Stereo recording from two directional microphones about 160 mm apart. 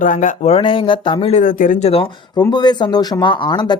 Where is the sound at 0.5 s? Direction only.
30° left (ahead or behind).